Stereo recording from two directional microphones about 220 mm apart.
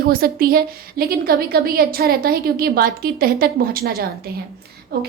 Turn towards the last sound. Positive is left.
turn(degrees=-45)  # may be behind; listen again after turning